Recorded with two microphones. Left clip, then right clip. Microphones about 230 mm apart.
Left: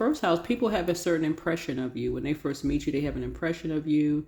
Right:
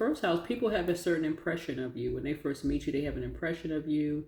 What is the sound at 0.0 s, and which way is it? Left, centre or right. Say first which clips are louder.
Speech: left 4 dB; left.